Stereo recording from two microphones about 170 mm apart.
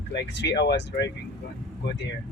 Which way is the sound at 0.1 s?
90° left.